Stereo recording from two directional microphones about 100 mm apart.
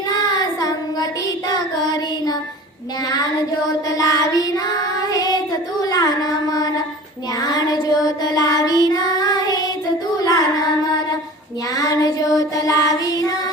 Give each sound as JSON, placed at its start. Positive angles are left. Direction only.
{"t": 0.1, "sound": "child singing", "side_deg": 40}
{"t": 3.8, "sound": "child singing", "side_deg": 40}
{"t": 5.8, "sound": "a sound", "side_deg": 40}
{"t": 7.3, "sound": "child singing", "side_deg": 40}
{"t": 11.7, "sound": "child singing", "side_deg": 35}